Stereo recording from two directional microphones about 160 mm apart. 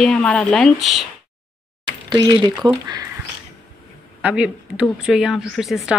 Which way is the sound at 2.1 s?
25° right (ahead or behind).